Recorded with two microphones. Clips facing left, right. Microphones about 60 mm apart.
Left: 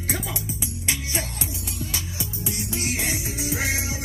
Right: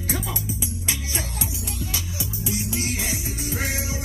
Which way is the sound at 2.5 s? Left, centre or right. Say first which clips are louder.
Right 4 dB; left.